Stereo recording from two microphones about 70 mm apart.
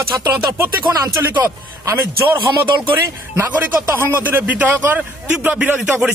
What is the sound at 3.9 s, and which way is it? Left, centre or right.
Speech, right.